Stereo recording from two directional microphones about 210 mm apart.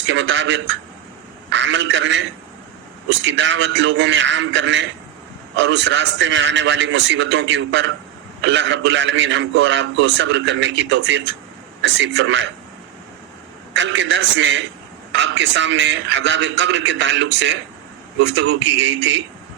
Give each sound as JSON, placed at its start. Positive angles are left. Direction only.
{"t": 0.1, "sound": "a man's voice", "side_deg": -60}
{"t": 13.7, "sound": "a man's voice", "side_deg": -60}